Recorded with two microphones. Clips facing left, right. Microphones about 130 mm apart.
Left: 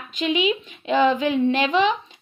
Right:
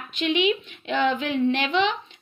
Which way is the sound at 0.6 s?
35° left (ahead or behind).